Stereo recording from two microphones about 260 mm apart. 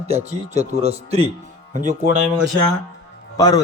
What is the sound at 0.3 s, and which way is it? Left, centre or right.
Speech, right.